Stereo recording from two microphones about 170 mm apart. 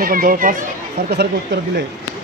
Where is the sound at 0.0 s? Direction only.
55° right (ahead or behind).